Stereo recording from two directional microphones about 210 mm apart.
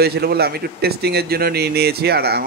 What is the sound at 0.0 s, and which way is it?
Speech, 50° right (ahead or behind).